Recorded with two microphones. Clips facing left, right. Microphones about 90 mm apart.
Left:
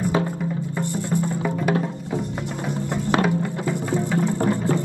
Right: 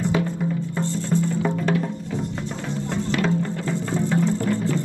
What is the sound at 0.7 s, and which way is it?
Music, 15° left (ahead or behind).